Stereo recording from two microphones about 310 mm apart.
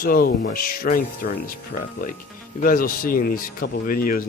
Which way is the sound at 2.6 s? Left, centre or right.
Left.